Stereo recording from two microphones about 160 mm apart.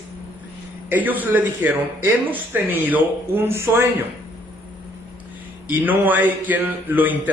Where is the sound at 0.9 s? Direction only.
10° right (ahead or behind).